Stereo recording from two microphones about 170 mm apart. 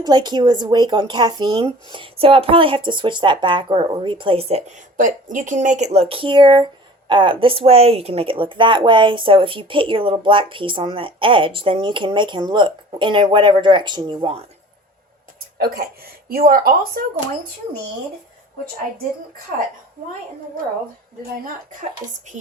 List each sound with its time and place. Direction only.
0.0 s speech: 25° right (ahead or behind)
15.5 s a woman's voice: 65° right (ahead or behind)